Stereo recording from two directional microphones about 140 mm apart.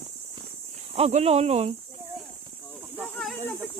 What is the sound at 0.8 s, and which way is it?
Speech, 50° right (ahead or behind).